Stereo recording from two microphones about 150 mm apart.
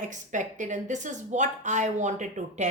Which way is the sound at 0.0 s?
55° right (ahead or behind).